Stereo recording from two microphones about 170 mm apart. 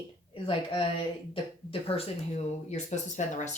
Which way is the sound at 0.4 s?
30° left (ahead or behind).